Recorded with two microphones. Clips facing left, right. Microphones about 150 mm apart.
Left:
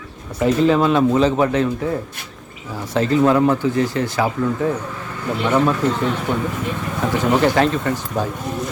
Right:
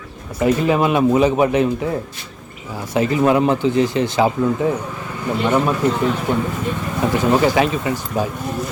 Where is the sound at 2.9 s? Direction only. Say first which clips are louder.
Even; 10° right (ahead or behind).